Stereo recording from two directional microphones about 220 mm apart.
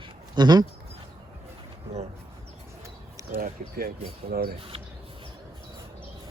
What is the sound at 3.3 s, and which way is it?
Speech, 40° right (ahead or behind).